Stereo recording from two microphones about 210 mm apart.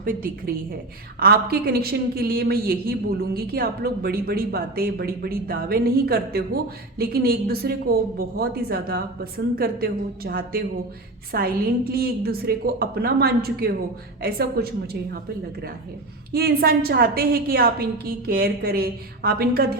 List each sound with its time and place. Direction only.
0.0 s a woman's voice: 45° right (ahead or behind)
16.3 s a woman's voice: 45° right (ahead or behind)